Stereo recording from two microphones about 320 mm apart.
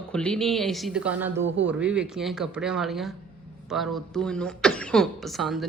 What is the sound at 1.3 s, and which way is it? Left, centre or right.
Speech, right.